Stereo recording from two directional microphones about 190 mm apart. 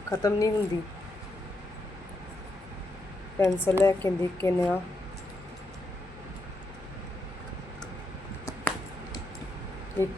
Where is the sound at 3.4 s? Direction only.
10° left (ahead or behind).